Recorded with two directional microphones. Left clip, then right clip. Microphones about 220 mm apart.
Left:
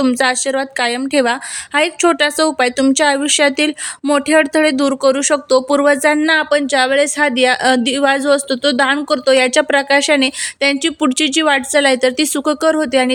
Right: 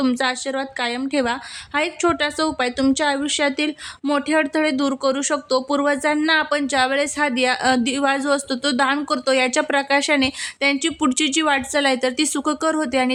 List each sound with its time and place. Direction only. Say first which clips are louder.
0.0 s a woman's voice: left 7 dB; 30° left (ahead or behind)